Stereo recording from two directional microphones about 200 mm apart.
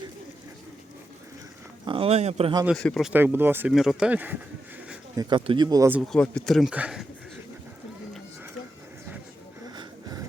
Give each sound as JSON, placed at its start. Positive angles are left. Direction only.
{"t": 1.8, "sound": "speech", "side_deg": -25}
{"t": 2.6, "sound": "speech", "side_deg": 5}
{"t": 3.1, "sound": "speech", "side_deg": -10}
{"t": 5.1, "sound": "speech", "side_deg": -20}
{"t": 6.1, "sound": "speech", "side_deg": 5}
{"t": 9.7, "sound": "music", "side_deg": -20}